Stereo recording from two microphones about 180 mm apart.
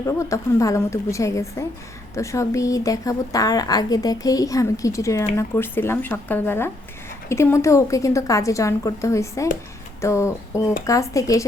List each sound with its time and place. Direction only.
0.0 s a woman's voice: 15° left (ahead or behind)